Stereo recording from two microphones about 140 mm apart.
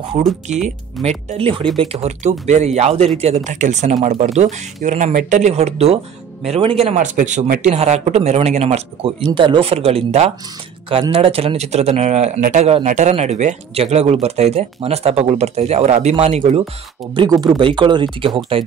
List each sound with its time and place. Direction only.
0.2 s speech: 55° right (ahead or behind)
1.0 s speech: 40° right (ahead or behind); by 7.7 s 75° right (ahead or behind)
7.7 s speech: 50° right (ahead or behind)
17.1 s speech: 35° right (ahead or behind)